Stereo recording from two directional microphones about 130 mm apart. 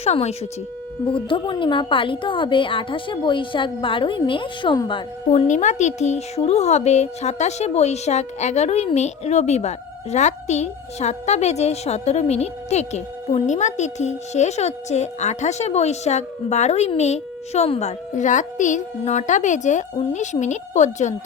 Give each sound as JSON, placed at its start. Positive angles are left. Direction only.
{"t": 0.0, "sound": "speech", "side_deg": 55}
{"t": 1.0, "sound": "a woman's voice", "side_deg": 40}
{"t": 5.3, "sound": "speech", "side_deg": 60}